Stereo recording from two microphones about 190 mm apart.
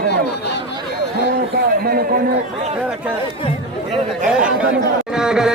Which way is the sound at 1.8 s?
50° right (ahead or behind).